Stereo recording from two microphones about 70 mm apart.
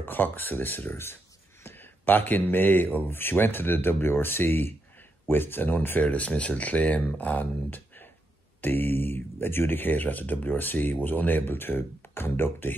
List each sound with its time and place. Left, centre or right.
0.0 s speech: left